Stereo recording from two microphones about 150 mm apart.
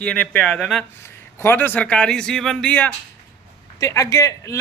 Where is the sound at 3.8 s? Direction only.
20° left (ahead or behind).